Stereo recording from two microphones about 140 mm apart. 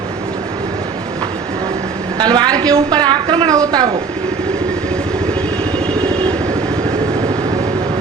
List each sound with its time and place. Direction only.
2.1 s a woman's voice: 30° right (ahead or behind)